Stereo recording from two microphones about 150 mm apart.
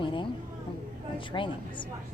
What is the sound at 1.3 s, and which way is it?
Speech, 35° left (ahead or behind).